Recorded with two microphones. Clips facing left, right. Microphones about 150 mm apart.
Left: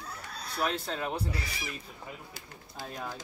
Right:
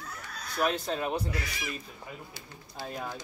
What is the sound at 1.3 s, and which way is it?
Speech, 30° left (ahead or behind).